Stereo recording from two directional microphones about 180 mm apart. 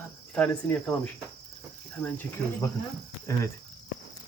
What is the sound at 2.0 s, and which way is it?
Speech, 10° left (ahead or behind).